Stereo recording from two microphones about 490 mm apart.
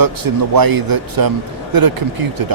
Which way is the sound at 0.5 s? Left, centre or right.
Right.